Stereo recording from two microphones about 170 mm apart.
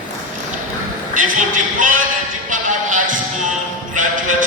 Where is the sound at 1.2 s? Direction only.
50° right (ahead or behind).